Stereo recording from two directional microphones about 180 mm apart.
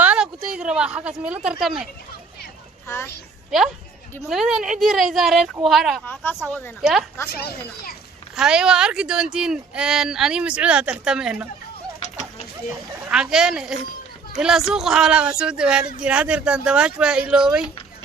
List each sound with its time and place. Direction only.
0.0 s a sound: 5° right (ahead or behind)
1.5 s speech: centre (ahead or behind)
2.8 s speech: 15° left (ahead or behind)
4.3 s speech: centre (ahead or behind)
6.5 s speech: 10° left (ahead or behind)
7.3 s speech: 60° left (ahead or behind)
8.4 s speech: 5° right (ahead or behind)
13.1 s speech: 5° right (ahead or behind)